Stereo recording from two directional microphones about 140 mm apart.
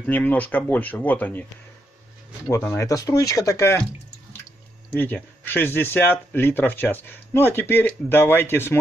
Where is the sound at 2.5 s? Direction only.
15° left (ahead or behind).